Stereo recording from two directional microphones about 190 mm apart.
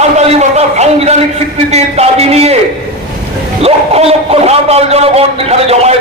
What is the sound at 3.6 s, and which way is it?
Dog, 30° right (ahead or behind).